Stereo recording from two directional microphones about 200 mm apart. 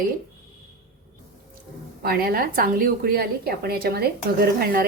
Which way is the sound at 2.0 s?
50° right (ahead or behind).